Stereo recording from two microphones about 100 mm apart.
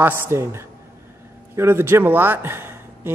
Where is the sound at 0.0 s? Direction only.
25° right (ahead or behind).